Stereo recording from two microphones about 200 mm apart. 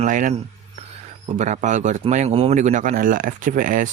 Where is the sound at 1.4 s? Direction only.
35° right (ahead or behind).